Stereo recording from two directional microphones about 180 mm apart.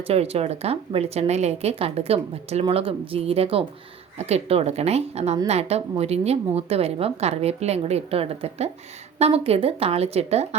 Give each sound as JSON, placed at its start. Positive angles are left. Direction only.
{"t": 0.1, "sound": "speech", "side_deg": -35}